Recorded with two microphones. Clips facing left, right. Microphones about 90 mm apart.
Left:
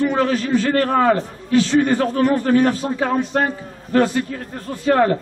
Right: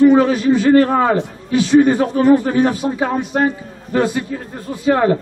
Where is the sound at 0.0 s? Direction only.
15° right (ahead or behind).